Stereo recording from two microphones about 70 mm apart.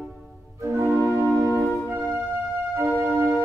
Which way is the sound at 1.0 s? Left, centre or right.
Right.